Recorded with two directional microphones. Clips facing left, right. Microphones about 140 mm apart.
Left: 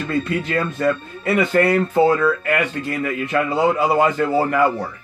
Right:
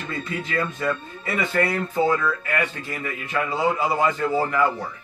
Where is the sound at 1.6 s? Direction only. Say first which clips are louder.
Left 5 dB; 70° left (ahead or behind).